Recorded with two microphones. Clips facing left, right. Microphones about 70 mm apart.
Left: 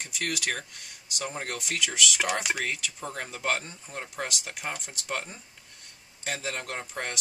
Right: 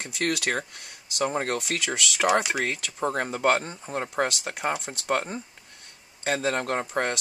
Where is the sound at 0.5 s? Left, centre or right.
Right.